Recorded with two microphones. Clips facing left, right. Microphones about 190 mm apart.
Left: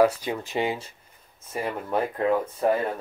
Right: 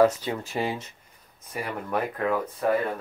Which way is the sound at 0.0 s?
10° left (ahead or behind).